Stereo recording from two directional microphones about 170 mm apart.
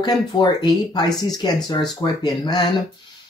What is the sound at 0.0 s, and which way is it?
Speech, 25° left (ahead or behind).